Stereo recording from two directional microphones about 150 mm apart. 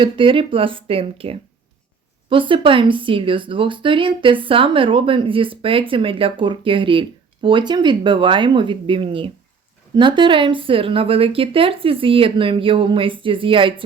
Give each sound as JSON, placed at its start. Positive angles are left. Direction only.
{"t": 0.0, "sound": "speech", "side_deg": -35}